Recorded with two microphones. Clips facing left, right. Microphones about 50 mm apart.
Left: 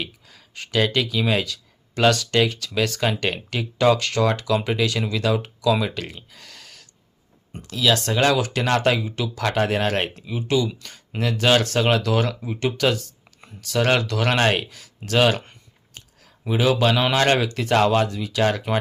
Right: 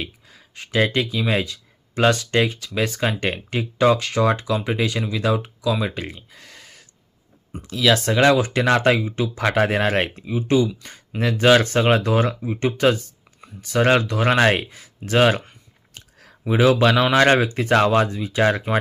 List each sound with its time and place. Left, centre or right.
0.3 s a sound: centre
1.3 s speech: right
7.8 s speech: right
11.2 s speech: right
16.5 s speech: right